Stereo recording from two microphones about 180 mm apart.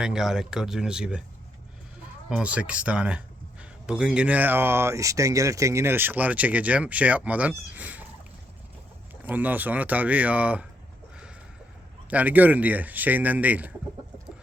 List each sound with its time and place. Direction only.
0.0 s speech: 5° right (ahead or behind)
2.3 s speech: 5° right (ahead or behind)
9.2 s speech: 10° right (ahead or behind)
12.1 s speech: 10° right (ahead or behind)